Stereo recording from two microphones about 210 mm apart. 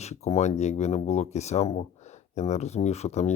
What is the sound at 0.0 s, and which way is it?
Speech, 30° left (ahead or behind).